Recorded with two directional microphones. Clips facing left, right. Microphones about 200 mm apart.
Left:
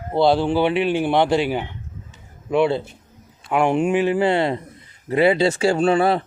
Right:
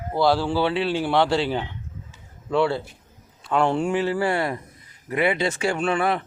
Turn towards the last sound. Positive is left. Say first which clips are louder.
# left 6 dB
turn(degrees=30)  # may be behind; listen again after turning